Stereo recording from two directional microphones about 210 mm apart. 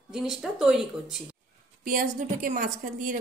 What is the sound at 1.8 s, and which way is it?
A woman's voice, 40° right (ahead or behind).